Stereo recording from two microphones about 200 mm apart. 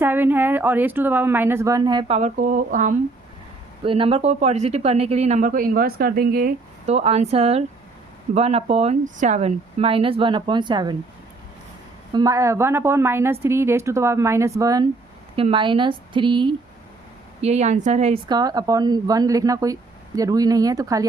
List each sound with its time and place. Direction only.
0.0 s speech: 10° right (ahead or behind)
2.1 s speech: 40° right (ahead or behind)
3.8 s speech: 25° right (ahead or behind); by 6.5 s 50° right (ahead or behind)
6.8 s speech: 30° right (ahead or behind)
12.1 s speech: 15° right (ahead or behind)
17.4 s speech: 35° right (ahead or behind)
18.3 s speech: 20° right (ahead or behind)